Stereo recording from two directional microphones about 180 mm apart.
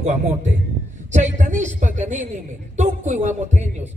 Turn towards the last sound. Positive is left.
turn(degrees=-40)  # may be behind; listen again after turning